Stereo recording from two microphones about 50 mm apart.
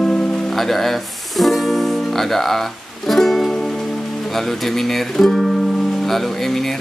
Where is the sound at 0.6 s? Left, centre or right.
Centre.